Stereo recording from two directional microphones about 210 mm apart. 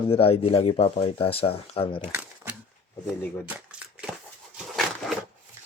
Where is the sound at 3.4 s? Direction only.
5° right (ahead or behind).